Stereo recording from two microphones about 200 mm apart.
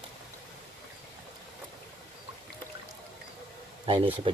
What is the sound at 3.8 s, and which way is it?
Speech, 25° right (ahead or behind).